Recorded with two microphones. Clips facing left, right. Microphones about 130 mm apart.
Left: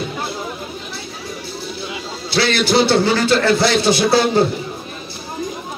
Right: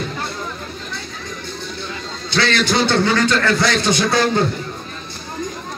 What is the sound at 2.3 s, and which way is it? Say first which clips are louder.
A man's voice: left 2 dB; 30° left (ahead or behind).